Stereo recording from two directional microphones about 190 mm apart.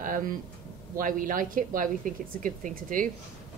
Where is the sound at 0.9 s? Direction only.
45° right (ahead or behind).